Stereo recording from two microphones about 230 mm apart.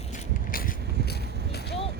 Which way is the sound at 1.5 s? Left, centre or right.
Left.